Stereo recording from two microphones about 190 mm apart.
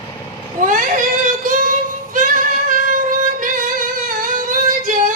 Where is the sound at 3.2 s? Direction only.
45° right (ahead or behind).